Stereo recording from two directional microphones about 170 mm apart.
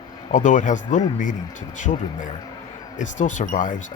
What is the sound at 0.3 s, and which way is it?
Speech, 45° left (ahead or behind).